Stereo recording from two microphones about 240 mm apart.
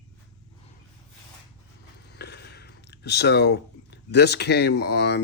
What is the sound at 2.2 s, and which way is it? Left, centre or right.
Speech, left.